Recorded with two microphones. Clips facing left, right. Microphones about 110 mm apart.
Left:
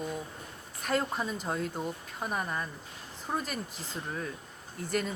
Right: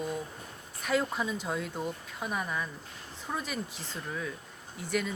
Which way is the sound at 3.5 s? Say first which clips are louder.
Right 1 dB; centre (ahead or behind).